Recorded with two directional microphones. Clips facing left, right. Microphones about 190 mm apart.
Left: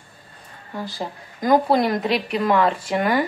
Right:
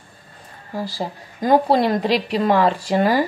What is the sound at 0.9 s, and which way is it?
A woman's voice, 25° right (ahead or behind).